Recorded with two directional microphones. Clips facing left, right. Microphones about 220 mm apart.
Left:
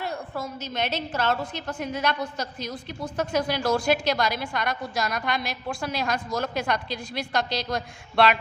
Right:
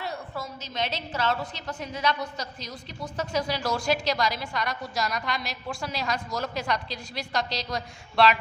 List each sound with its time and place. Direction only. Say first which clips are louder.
0.0 s a woman's voice: left 3 dB; 55° left (ahead or behind)